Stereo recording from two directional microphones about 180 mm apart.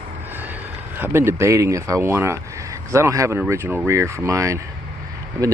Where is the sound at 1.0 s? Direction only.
15° right (ahead or behind).